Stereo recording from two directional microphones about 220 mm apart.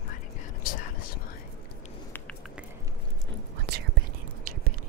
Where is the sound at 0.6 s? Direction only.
40° left (ahead or behind).